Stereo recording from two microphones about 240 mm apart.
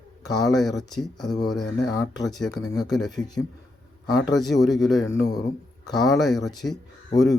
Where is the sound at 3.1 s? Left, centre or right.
Centre.